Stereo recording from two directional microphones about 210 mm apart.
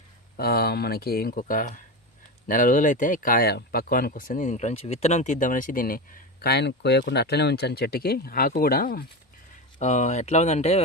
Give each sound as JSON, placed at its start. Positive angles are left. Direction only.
{"t": 0.3, "sound": "speech", "side_deg": 45}
{"t": 6.4, "sound": "speech", "side_deg": 50}